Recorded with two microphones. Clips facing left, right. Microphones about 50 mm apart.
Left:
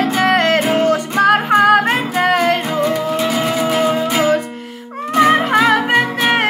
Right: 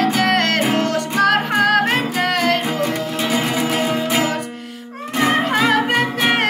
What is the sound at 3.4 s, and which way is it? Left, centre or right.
Music, centre.